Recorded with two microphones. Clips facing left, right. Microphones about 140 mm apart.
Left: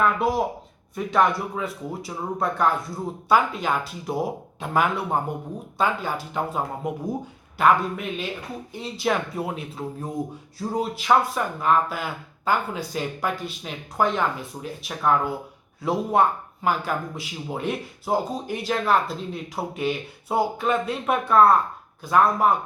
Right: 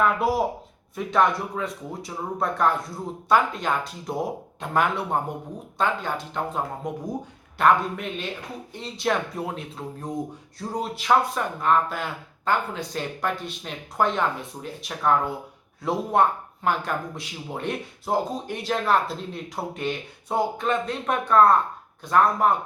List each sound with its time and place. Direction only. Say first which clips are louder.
0.0 s speech: even; centre (ahead or behind)